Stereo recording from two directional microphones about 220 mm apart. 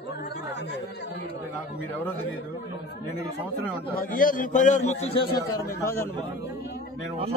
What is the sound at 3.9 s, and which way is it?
A man's voice, 40° left (ahead or behind).